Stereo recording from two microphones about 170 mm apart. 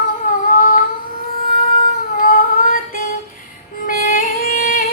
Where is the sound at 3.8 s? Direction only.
55° left (ahead or behind).